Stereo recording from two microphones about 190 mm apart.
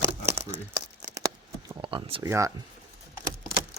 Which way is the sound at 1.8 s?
25° right (ahead or behind).